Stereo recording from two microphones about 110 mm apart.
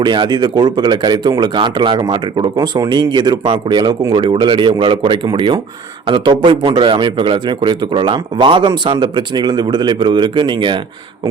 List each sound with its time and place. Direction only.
0.0 s speech: 45° right (ahead or behind)